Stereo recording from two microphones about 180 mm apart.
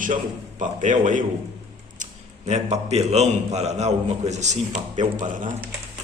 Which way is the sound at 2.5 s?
35° right (ahead or behind).